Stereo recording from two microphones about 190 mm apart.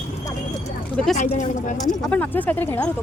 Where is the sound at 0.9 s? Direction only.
Centre (ahead or behind).